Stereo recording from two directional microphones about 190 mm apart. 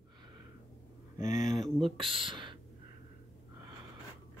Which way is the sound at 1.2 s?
40° left (ahead or behind).